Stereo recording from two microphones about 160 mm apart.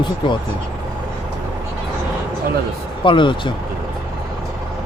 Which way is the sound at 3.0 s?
30° left (ahead or behind).